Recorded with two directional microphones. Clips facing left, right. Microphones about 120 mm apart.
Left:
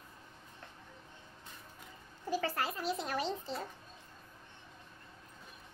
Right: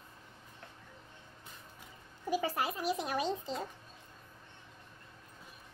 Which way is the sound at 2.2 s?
15° right (ahead or behind).